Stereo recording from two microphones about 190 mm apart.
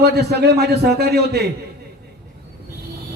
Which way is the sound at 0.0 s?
60° right (ahead or behind).